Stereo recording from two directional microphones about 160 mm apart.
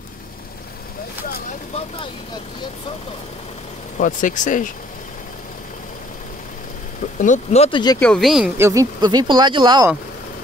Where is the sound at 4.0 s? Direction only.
55° left (ahead or behind).